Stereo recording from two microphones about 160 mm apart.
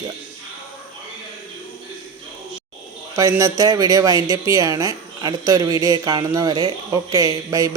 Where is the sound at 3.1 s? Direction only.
20° right (ahead or behind).